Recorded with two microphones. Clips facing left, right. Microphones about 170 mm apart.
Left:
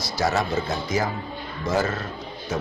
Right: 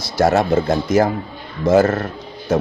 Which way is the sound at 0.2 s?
55° right (ahead or behind).